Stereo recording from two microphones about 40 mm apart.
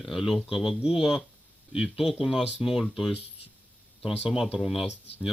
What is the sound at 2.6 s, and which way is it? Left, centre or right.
Speech, centre.